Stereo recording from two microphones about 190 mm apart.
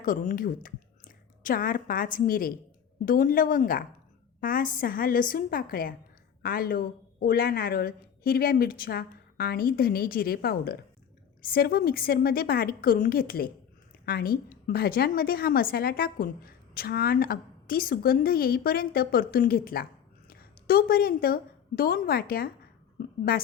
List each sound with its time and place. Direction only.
0.0 s a woman's voice: 45° left (ahead or behind)